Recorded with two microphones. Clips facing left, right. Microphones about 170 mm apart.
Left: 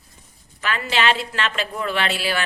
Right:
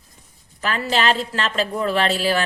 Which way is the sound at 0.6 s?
35° right (ahead or behind).